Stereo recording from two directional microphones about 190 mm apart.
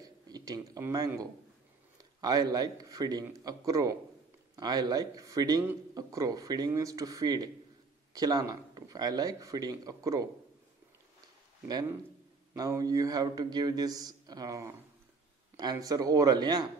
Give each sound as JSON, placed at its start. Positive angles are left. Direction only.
{"t": 0.0, "sound": "a man's voice", "side_deg": -20}
{"t": 11.6, "sound": "a man's voice", "side_deg": -20}